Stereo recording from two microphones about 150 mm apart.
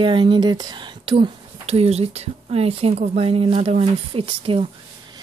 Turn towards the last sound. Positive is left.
turn(degrees=-35)  # may be behind; listen again after turning